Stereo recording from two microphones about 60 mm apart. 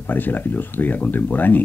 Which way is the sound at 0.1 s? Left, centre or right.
Left.